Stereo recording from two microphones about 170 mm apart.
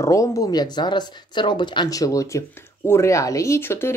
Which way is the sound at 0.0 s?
20° left (ahead or behind).